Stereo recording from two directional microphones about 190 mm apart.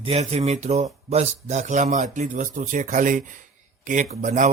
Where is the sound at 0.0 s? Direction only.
35° right (ahead or behind).